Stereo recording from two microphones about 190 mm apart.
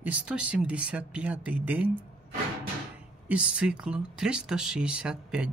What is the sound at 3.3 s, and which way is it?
Speech, 5° right (ahead or behind).